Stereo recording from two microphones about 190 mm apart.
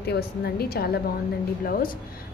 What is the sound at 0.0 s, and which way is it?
A woman's voice, 55° left (ahead or behind).